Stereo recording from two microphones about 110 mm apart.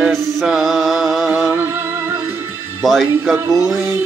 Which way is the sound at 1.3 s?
20° right (ahead or behind).